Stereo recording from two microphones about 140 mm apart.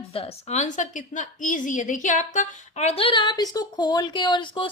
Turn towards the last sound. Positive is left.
turn(degrees=35)  # may be behind; listen again after turning